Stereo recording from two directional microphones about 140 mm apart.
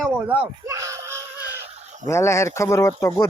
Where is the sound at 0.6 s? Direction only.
20° right (ahead or behind).